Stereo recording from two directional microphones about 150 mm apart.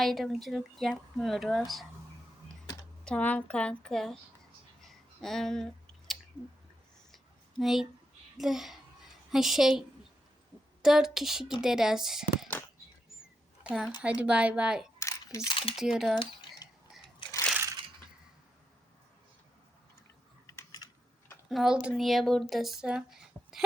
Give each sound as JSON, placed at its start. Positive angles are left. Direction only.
{"t": 0.0, "sound": "speech", "side_deg": 0}
{"t": 3.0, "sound": "a woman's voice", "side_deg": 10}
{"t": 4.8, "sound": "a sound", "side_deg": 0}
{"t": 7.6, "sound": "speech", "side_deg": 0}
{"t": 10.8, "sound": "speech", "side_deg": -5}
{"t": 13.7, "sound": "a woman's voice", "side_deg": -5}
{"t": 14.9, "sound": "camera", "side_deg": 20}
{"t": 15.4, "sound": "speech", "side_deg": 35}
{"t": 15.7, "sound": "speech", "side_deg": -5}
{"t": 16.1, "sound": "a sound", "side_deg": 35}
{"t": 20.5, "sound": "typing", "side_deg": 25}
{"t": 21.5, "sound": "speech", "side_deg": -5}